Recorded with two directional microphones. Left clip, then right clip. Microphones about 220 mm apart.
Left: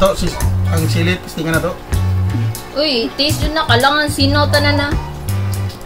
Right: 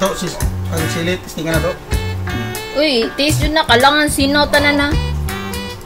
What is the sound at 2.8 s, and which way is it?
A woman's voice, 35° right (ahead or behind).